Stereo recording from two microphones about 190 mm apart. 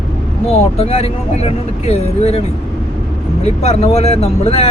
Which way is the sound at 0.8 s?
30° left (ahead or behind).